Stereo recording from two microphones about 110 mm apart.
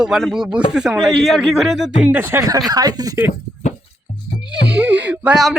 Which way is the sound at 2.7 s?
35° right (ahead or behind).